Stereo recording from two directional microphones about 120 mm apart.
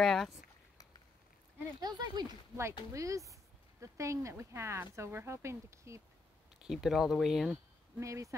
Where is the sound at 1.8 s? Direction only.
35° right (ahead or behind).